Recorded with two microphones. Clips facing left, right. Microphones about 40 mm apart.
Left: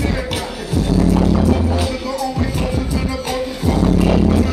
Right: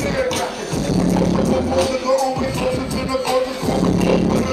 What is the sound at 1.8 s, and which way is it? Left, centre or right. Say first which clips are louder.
Music: right 5 dB; centre.